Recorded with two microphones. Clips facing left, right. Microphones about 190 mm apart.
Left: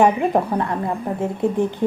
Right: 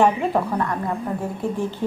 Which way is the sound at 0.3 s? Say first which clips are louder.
Left 2 dB; 25° left (ahead or behind).